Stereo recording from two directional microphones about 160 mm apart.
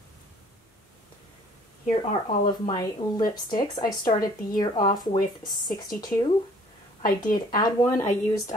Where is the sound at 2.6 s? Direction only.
25° left (ahead or behind).